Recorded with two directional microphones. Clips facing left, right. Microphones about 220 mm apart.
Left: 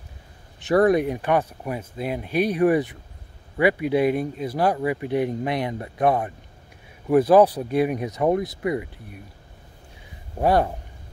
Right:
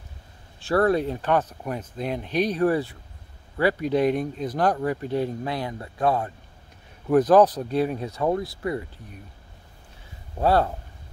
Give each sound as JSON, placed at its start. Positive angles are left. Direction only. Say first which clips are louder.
{"t": 0.6, "sound": "speech", "louder": "left 3 dB", "side_deg": 20}
{"t": 10.4, "sound": "speech", "louder": "left 1 dB", "side_deg": 15}